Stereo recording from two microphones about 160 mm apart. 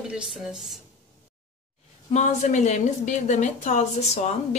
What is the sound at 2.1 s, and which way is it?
A woman's voice, 45° left (ahead or behind).